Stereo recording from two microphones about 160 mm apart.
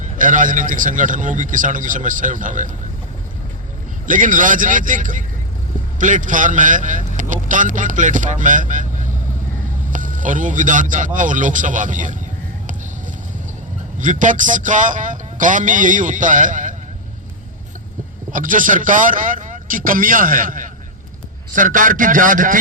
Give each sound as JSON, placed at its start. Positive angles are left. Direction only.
{"t": 0.0, "sound": "a man's voice", "side_deg": -55}
{"t": 4.0, "sound": "a man's voice", "side_deg": -55}
{"t": 14.0, "sound": "a man's voice", "side_deg": -55}
{"t": 18.3, "sound": "a man's voice", "side_deg": -55}